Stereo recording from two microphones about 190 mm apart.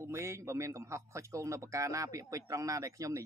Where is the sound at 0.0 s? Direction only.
15° right (ahead or behind).